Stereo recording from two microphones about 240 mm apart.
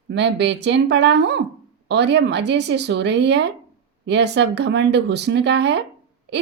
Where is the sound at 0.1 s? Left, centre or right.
Right.